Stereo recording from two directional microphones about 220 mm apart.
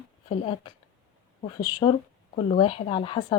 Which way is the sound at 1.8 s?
20° left (ahead or behind).